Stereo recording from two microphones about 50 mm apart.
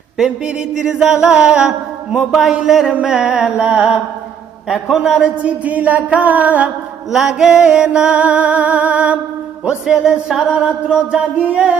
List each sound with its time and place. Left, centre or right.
0.3 s mantra: centre
4.9 s mantra: centre
5.4 s music: right
7.1 s music: centre; by 9.1 s right
9.8 s mantra: centre
10.5 s music: right